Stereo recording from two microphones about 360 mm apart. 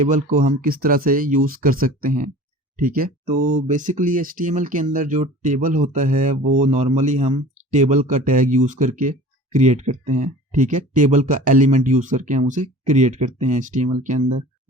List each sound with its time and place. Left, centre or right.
0.0 s speech: centre
14.2 s speech: right